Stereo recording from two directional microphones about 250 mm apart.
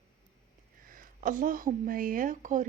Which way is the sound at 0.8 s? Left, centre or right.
Right.